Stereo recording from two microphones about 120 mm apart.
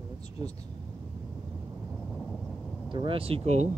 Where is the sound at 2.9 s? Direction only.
45° right (ahead or behind).